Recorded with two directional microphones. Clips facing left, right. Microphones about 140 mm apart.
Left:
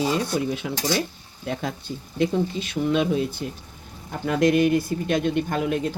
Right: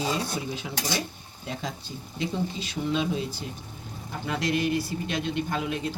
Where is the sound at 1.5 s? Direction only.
55° left (ahead or behind).